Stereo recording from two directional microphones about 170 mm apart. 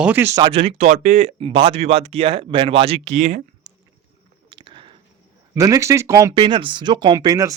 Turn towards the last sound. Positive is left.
turn(degrees=-20)  # may be behind; listen again after turning